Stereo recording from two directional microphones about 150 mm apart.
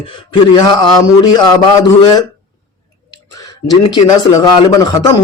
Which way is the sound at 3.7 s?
30° left (ahead or behind).